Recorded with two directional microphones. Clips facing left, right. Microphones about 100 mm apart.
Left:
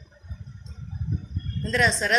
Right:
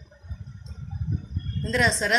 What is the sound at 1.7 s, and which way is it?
Speech, 20° right (ahead or behind).